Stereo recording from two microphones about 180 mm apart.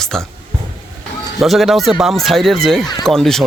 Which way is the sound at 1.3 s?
Centre (ahead or behind).